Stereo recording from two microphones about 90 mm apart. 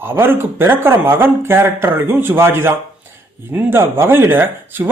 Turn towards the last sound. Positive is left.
turn(degrees=-25)  # may be behind; listen again after turning